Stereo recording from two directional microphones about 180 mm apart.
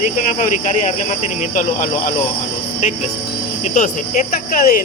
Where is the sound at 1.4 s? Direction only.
45° left (ahead or behind).